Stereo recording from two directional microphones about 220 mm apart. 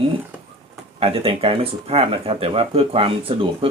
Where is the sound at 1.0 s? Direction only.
25° right (ahead or behind).